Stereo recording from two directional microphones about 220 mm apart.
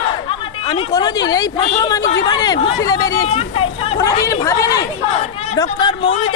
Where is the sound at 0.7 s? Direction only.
15° left (ahead or behind).